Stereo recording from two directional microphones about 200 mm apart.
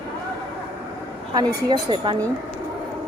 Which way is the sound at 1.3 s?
20° right (ahead or behind).